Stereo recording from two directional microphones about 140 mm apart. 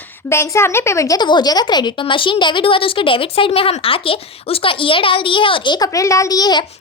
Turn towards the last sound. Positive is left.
turn(degrees=30)  # may be behind; listen again after turning